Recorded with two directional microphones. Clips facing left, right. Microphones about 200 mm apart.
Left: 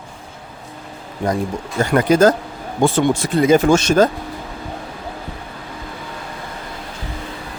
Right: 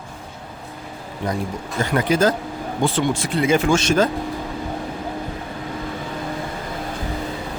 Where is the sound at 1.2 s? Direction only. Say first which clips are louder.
Left 5 dB; 45° left (ahead or behind).